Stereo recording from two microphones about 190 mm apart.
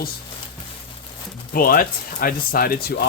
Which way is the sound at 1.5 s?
50° left (ahead or behind).